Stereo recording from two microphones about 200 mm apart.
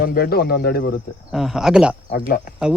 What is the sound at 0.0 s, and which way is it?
Speech, 50° left (ahead or behind).